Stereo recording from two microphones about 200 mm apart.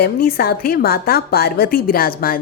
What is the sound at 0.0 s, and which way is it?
A woman's voice, 50° left (ahead or behind).